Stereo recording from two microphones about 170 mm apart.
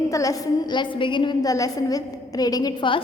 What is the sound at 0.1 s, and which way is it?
A woman's voice, 20° left (ahead or behind).